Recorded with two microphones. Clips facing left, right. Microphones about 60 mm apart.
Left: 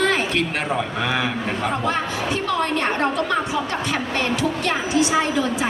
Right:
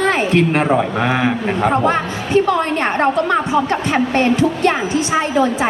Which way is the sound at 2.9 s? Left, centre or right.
Right.